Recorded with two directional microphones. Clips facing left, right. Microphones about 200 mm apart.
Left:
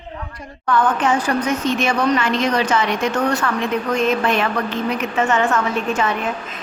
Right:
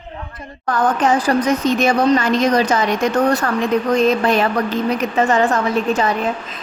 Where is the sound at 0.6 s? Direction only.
40° right (ahead or behind).